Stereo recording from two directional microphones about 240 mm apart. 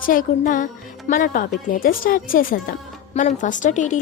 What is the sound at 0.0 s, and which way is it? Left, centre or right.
A woman's voice, left.